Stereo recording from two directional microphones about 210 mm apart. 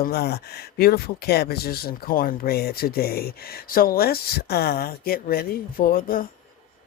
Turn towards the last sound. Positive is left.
turn(degrees=40)  # may be behind; listen again after turning